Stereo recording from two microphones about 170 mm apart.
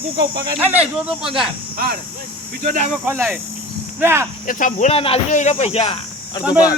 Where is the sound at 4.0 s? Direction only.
15° right (ahead or behind).